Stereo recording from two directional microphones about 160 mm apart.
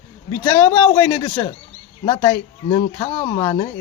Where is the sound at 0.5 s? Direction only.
15° left (ahead or behind).